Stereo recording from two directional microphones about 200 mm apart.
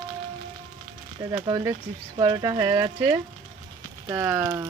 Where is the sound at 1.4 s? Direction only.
15° right (ahead or behind).